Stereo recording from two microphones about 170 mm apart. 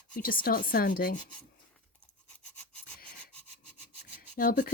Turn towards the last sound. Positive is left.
turn(degrees=55)  # may be behind; listen again after turning